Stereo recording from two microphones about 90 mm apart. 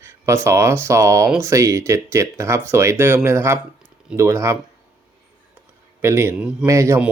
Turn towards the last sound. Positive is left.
turn(degrees=-30)  # may be behind; listen again after turning